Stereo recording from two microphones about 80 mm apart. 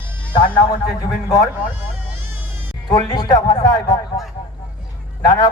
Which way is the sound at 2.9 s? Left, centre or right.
Left.